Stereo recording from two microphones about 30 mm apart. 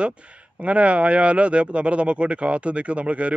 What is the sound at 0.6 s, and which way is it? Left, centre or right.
Speech, right.